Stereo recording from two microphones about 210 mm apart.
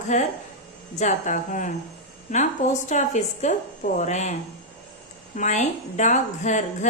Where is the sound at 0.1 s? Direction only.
35° left (ahead or behind).